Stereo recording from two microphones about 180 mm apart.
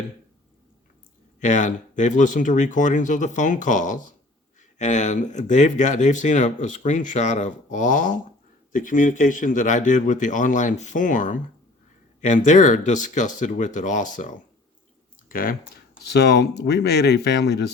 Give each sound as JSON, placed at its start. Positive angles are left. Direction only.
{"t": 1.4, "sound": "speech", "side_deg": 40}